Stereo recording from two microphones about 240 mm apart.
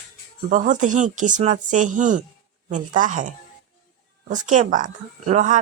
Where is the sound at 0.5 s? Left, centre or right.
Right.